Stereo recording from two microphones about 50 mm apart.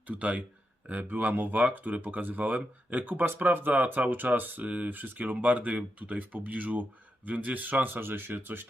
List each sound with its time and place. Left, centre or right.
0.1 s speech: right